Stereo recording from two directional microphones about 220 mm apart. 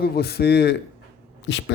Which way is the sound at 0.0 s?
45° left (ahead or behind).